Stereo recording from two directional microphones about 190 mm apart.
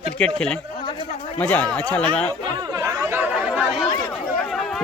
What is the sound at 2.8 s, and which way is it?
Chatter, 10° right (ahead or behind).